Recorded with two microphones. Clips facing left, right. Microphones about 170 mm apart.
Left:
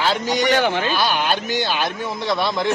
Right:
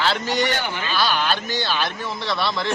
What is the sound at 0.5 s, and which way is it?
Speech, 85° left.